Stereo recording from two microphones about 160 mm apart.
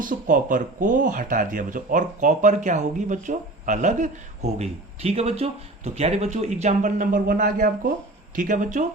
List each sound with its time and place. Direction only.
0.0 s speech: 55° right (ahead or behind)